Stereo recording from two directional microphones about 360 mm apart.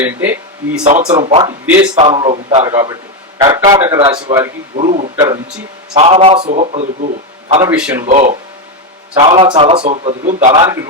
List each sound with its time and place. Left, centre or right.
0.0 s a man's voice: centre
0.9 s a man's voice: centre
7.6 s a man's voice: centre
8.0 s a man's voice: centre